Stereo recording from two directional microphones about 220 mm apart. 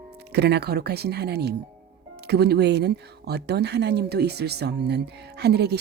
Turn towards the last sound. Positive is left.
turn(degrees=-50)  # may be behind; listen again after turning